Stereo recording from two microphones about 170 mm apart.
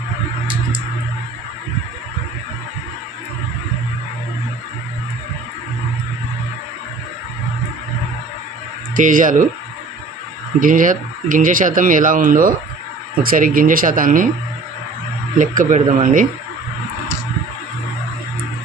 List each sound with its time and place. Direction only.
9.0 s speech: 50° right (ahead or behind)
10.6 s speech: 50° right (ahead or behind)
15.4 s speech: 45° right (ahead or behind)